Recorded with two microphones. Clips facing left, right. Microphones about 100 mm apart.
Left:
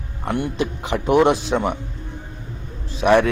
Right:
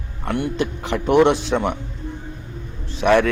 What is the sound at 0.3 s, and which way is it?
A man's voice, 15° left (ahead or behind).